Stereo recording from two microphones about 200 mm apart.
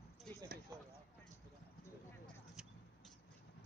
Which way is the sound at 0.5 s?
50° right (ahead or behind).